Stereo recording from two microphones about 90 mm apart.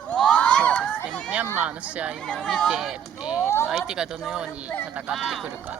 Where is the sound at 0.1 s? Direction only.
10° left (ahead or behind).